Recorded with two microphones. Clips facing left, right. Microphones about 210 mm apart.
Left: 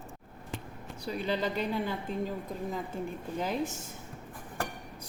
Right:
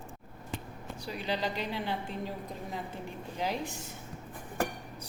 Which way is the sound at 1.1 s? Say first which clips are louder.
Left 3 dB; 50° left (ahead or behind).